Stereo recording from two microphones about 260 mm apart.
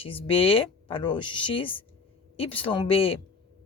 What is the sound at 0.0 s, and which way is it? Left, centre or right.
Speech, left.